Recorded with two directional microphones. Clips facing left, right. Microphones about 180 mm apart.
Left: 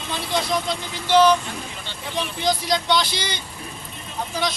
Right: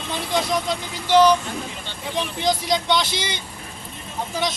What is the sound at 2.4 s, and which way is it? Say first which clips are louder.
Speech: even; 20° right (ahead or behind).